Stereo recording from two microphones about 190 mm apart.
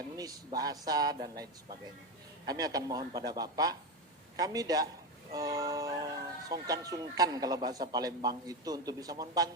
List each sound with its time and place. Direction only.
0.2 s speech: 20° right (ahead or behind)
2.5 s speech: 20° right (ahead or behind)